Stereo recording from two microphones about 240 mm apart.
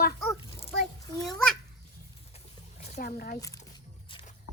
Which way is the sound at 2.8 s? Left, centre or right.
Left.